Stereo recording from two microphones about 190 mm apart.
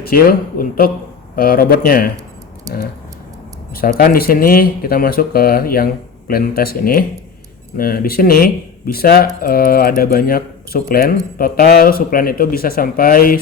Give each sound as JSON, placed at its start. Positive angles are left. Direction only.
{"t": 0.0, "sound": "speech", "side_deg": 50}
{"t": 3.8, "sound": "speech", "side_deg": 50}